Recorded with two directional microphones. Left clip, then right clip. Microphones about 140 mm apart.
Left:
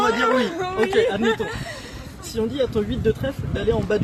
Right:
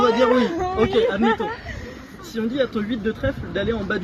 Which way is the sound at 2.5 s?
40° left (ahead or behind).